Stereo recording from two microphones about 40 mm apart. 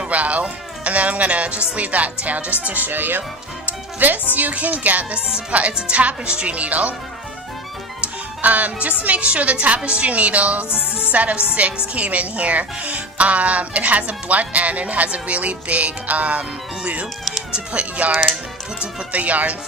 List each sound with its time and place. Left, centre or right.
0.1 s a woman's voice: right
3.7 s music: right
4.4 s speech: right
5.1 s a woman's voice: right
8.0 s a woman's voice: right
19.1 s a woman's voice: right